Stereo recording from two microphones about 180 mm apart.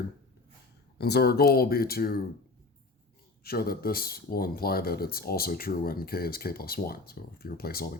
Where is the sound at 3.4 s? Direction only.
60° left (ahead or behind).